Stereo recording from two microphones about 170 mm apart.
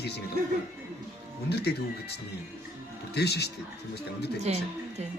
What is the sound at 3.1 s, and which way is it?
Speech, 75° left (ahead or behind).